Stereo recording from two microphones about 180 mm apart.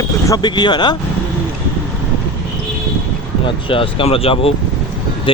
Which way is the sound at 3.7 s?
30° left (ahead or behind).